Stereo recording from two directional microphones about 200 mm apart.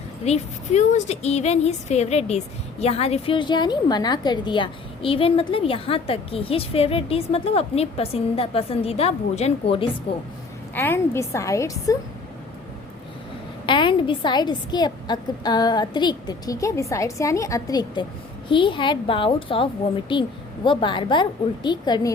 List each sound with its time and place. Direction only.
0.3 s a woman's voice: 35° left (ahead or behind)
10.8 s a woman's voice: 10° left (ahead or behind)
13.7 s a woman's voice: 25° left (ahead or behind)